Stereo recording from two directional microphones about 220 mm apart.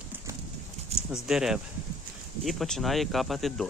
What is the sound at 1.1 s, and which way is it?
Speech, centre (ahead or behind).